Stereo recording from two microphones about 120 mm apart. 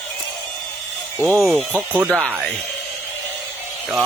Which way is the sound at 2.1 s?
Centre (ahead or behind).